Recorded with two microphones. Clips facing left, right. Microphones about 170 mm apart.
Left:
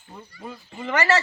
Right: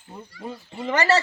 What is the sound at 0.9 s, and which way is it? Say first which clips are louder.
Speech: right 1 dB; 35° right (ahead or behind).